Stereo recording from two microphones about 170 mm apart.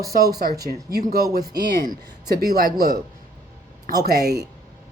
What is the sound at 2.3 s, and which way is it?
Speech, 65° right (ahead or behind).